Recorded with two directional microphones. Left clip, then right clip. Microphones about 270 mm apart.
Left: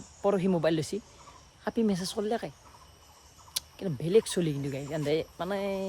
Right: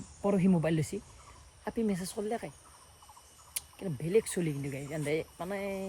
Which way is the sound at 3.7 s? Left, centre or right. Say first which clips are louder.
Left 4 dB; centre.